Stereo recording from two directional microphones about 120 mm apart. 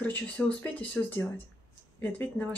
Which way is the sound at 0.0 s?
15° left (ahead or behind).